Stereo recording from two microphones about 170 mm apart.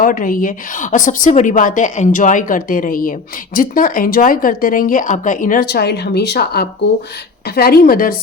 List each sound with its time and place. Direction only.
0.0 s a woman's voice: 55° left (ahead or behind)